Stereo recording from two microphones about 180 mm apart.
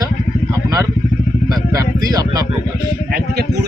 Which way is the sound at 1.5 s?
20° right (ahead or behind).